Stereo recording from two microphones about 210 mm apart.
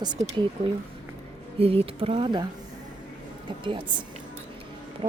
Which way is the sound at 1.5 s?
30° right (ahead or behind).